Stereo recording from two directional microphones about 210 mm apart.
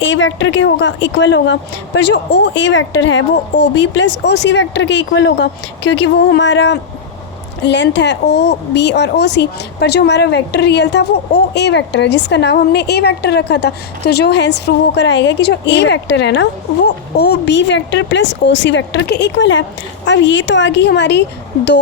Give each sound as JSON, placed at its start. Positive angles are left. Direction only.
{"t": 0.0, "sound": "speech", "side_deg": 65}